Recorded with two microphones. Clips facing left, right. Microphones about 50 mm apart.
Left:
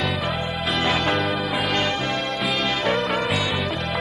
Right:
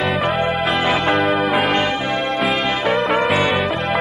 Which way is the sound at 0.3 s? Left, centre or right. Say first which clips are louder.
Right 7 dB; centre.